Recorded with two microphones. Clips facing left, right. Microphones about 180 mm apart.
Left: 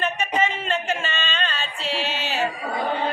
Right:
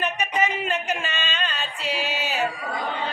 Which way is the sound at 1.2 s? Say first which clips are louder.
Left 2 dB; 5° right (ahead or behind).